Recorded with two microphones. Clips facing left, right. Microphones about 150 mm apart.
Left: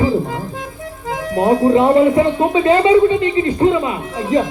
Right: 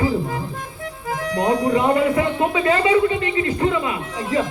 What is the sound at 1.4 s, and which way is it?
Speech, 25° left (ahead or behind).